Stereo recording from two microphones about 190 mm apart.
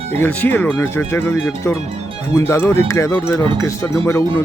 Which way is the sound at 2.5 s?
15° left (ahead or behind).